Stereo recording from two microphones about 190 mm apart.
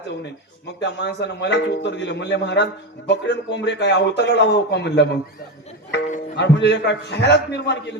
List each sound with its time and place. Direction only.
0.8 s a man's voice: 65° left (ahead or behind)
6.3 s a man's voice: 60° left (ahead or behind)